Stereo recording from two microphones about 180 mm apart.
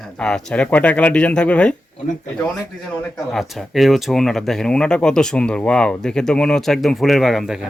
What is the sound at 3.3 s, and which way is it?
Speech, centre (ahead or behind).